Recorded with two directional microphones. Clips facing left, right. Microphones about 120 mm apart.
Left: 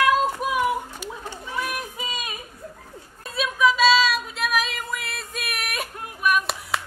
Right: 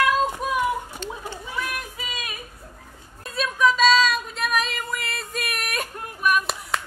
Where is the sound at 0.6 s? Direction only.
10° left (ahead or behind).